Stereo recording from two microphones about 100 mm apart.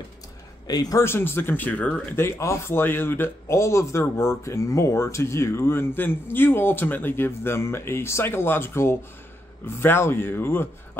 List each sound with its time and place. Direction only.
0.7 s speech: 40° left (ahead or behind)
1.0 s speech: 20° left (ahead or behind)